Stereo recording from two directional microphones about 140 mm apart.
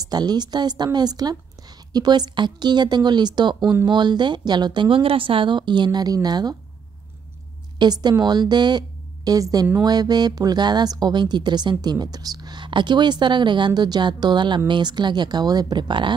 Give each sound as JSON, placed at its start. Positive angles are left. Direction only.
{"t": 0.0, "sound": "a woman's voice", "side_deg": -30}
{"t": 7.8, "sound": "a woman's voice", "side_deg": -30}